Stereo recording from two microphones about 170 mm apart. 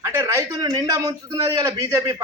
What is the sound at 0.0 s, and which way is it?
A man's voice, 15° right (ahead or behind).